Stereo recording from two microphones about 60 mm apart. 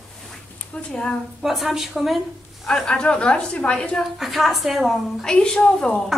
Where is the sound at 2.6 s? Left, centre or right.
Centre.